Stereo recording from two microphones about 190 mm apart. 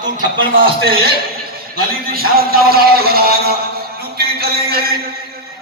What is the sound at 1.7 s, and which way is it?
A man's voice, 50° right (ahead or behind).